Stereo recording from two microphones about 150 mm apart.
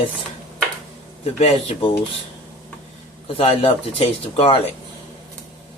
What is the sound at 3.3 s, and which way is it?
Speech, 40° left (ahead or behind).